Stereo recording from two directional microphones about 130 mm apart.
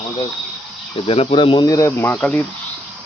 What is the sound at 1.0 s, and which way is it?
Speech, 45° left (ahead or behind).